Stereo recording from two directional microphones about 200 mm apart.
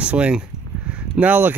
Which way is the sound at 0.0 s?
5° right (ahead or behind).